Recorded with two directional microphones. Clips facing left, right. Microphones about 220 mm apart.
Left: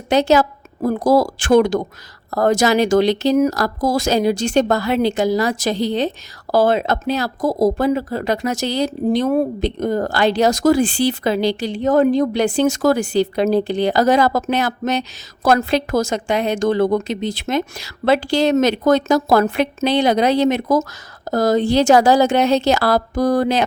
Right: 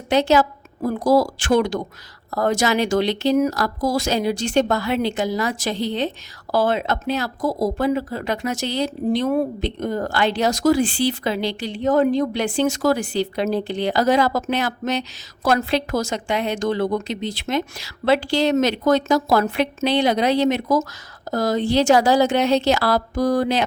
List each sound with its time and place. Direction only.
0.1 s a woman's voice: 40° left (ahead or behind)